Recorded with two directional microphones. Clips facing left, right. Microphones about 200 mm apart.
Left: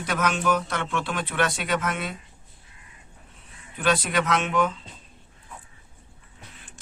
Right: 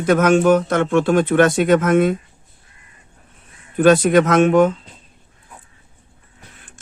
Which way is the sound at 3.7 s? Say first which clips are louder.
Right 12 dB; 45° right (ahead or behind).